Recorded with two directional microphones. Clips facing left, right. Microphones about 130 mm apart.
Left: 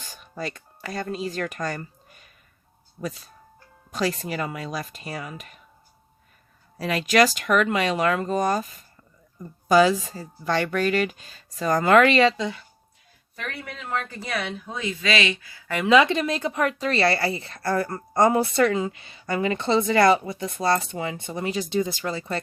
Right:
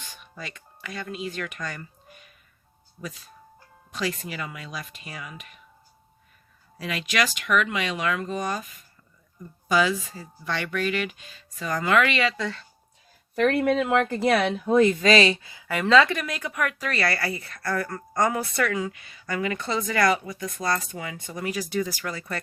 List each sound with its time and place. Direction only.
0.0 s speech: 40° left (ahead or behind)
6.7 s speech: 40° left (ahead or behind)
12.4 s speech: 15° left (ahead or behind)
13.3 s speech: 70° right (ahead or behind); by 15.4 s 35° right (ahead or behind)
15.6 s a woman's voice: centre (ahead or behind)
15.9 s speech: 20° left (ahead or behind)